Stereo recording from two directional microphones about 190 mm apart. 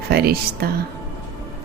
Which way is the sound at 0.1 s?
55° right (ahead or behind).